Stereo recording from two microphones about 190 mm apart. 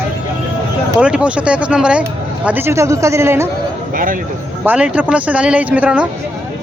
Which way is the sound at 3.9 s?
45° right (ahead or behind).